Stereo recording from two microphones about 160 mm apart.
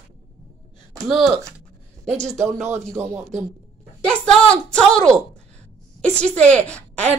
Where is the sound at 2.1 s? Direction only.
45° right (ahead or behind).